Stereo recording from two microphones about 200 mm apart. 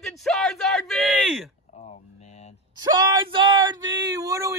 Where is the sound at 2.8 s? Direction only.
25° right (ahead or behind).